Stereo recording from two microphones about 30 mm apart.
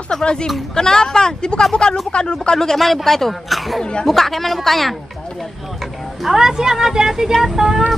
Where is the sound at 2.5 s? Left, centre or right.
Centre.